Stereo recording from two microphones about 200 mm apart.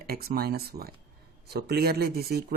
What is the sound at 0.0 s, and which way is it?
Speech, 50° right (ahead or behind).